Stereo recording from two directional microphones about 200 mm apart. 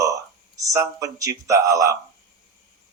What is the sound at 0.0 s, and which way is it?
Speech, 15° right (ahead or behind).